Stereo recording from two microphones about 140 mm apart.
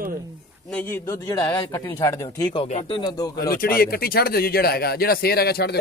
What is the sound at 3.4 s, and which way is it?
Speech, 90° left.